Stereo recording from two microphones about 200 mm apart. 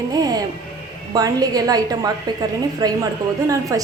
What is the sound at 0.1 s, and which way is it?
A woman's voice, 20° right (ahead or behind).